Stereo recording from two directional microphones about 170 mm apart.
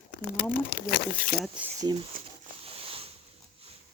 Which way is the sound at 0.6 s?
55° left (ahead or behind).